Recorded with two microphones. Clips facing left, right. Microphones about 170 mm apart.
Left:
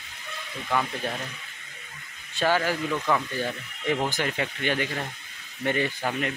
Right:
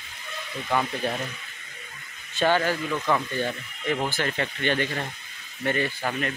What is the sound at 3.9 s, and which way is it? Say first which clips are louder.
Speech: even; 15° left (ahead or behind).